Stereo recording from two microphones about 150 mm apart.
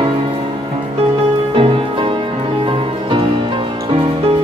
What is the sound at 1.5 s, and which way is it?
Music, 35° right (ahead or behind).